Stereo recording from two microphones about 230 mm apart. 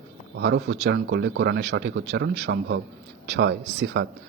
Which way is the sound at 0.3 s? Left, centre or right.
Right.